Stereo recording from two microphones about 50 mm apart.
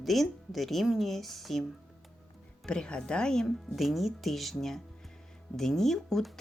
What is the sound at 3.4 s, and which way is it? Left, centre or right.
Speech, centre.